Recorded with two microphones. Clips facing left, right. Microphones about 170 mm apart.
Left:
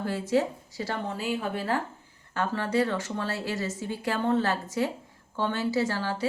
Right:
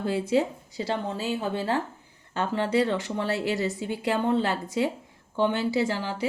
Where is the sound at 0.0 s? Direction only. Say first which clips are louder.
Right 2 dB; 20° right (ahead or behind).